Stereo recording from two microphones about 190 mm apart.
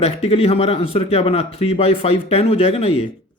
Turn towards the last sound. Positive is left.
turn(degrees=30)  # may be behind; listen again after turning